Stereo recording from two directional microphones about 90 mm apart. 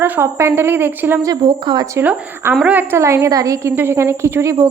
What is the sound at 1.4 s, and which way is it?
Speech, 55° right (ahead or behind).